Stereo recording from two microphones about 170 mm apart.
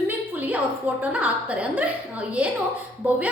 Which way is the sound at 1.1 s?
10° right (ahead or behind).